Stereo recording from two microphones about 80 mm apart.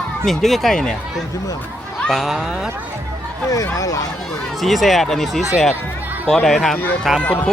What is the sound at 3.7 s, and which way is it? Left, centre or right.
Speech, left.